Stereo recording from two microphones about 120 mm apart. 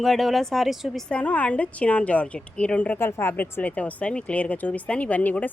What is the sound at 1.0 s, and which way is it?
A woman's voice, 10° left (ahead or behind).